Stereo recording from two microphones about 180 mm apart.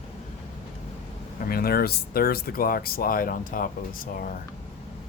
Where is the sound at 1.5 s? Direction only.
55° left (ahead or behind).